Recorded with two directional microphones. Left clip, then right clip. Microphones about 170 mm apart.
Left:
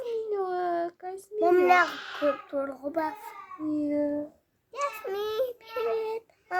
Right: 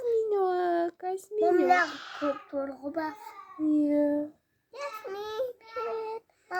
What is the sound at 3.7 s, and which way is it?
Speech, 50° right (ahead or behind).